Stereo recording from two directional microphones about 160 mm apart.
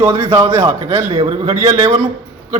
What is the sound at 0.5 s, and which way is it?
A man's voice, 40° right (ahead or behind).